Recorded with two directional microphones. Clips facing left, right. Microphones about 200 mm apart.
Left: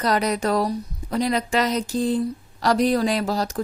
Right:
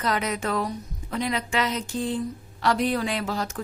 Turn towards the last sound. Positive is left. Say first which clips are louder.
# left 5 dB
turn(degrees=35)  # may be behind; listen again after turning